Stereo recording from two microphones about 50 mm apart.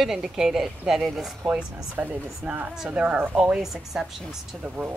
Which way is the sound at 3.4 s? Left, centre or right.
Centre.